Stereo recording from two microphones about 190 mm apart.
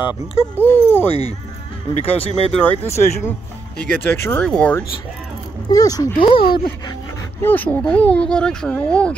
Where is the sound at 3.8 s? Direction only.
10° left (ahead or behind).